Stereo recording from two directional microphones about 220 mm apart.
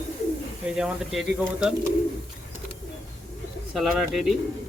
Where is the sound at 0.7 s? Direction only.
Centre (ahead or behind).